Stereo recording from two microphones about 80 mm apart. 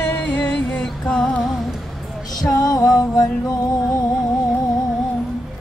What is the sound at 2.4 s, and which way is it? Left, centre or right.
Music, left.